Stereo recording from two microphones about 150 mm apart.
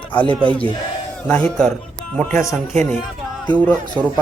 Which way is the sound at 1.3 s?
5° left (ahead or behind).